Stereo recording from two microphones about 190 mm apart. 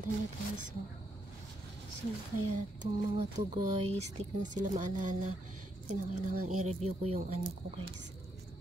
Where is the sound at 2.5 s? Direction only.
40° right (ahead or behind).